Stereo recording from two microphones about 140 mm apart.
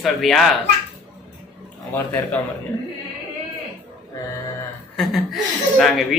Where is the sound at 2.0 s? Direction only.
15° left (ahead or behind).